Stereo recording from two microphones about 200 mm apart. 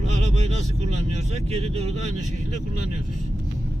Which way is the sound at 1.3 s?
30° right (ahead or behind).